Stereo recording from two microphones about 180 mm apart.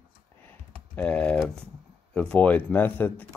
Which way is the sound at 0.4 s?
10° left (ahead or behind).